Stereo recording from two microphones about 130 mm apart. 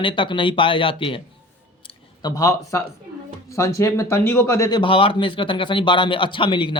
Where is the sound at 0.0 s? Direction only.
40° left (ahead or behind).